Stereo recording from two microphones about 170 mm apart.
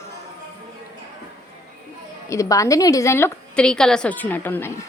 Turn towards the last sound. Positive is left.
turn(degrees=10)  # may be behind; listen again after turning